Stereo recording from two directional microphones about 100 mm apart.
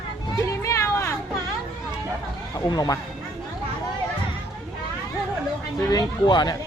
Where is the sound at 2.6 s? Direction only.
40° left (ahead or behind).